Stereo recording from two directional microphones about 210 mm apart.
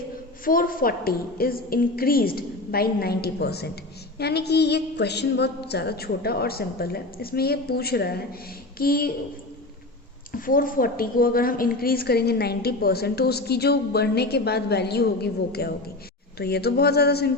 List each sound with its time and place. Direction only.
0.4 s a woman's voice: 40° left (ahead or behind)
10.3 s a woman's voice: 40° left (ahead or behind)